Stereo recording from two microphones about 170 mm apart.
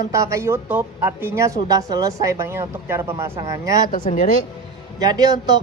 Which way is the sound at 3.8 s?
50° left (ahead or behind).